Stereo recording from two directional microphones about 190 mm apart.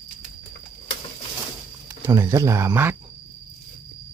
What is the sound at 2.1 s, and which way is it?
Speech, 15° right (ahead or behind).